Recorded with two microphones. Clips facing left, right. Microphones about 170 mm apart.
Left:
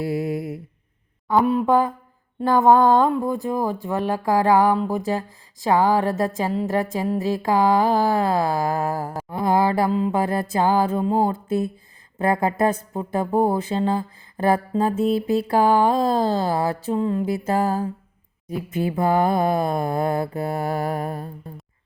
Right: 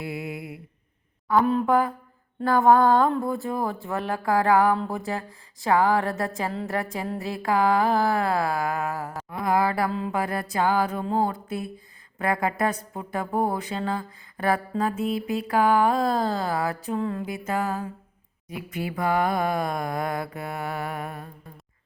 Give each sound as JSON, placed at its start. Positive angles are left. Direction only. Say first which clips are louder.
{"t": 0.0, "sound": "mantra", "louder": "left 8 dB", "side_deg": 40}
{"t": 1.4, "sound": "a sound", "louder": "left 3 dB", "side_deg": 10}
{"t": 6.9, "sound": "speech", "louder": "left 7 dB", "side_deg": 20}
{"t": 18.4, "sound": "mantra", "louder": "left 7 dB", "side_deg": 30}